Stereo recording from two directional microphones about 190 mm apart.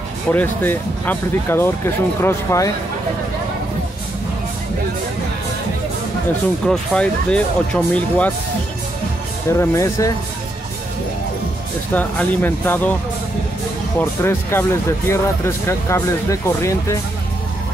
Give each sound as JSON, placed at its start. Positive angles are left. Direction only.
{"t": 0.3, "sound": "speech", "side_deg": 10}
{"t": 6.7, "sound": "speech", "side_deg": 5}
{"t": 9.5, "sound": "speech", "side_deg": 15}
{"t": 11.9, "sound": "speech", "side_deg": 10}
{"t": 13.9, "sound": "speech", "side_deg": 10}